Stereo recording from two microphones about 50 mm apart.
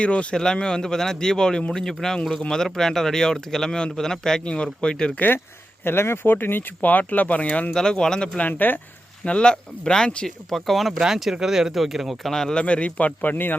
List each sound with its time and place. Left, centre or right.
0.0 s a man's voice: left
5.8 s speech: left
7.7 s speech: centre
8.4 s speech: left
9.2 s speech: centre
10.2 s speech: centre
12.3 s speech: centre
12.6 s a man's voice: left
13.2 s speech: left